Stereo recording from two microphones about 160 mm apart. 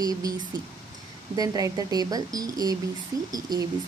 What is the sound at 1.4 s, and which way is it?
Speech, 20° right (ahead or behind).